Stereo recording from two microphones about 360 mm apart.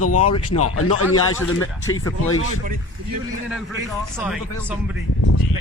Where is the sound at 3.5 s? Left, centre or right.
Centre.